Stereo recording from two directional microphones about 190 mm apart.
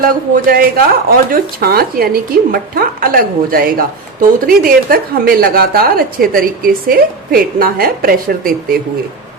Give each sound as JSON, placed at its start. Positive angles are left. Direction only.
{"t": 0.0, "sound": "speech", "side_deg": -50}